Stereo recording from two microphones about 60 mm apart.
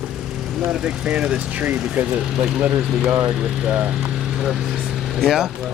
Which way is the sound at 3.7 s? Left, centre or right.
Right.